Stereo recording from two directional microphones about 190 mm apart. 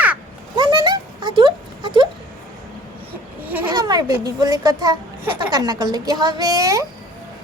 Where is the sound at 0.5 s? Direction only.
25° right (ahead or behind).